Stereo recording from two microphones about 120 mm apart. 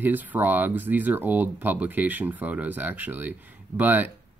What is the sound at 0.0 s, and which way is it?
Speech, 15° right (ahead or behind).